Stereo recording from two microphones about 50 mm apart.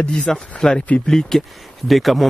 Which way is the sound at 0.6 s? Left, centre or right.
Centre.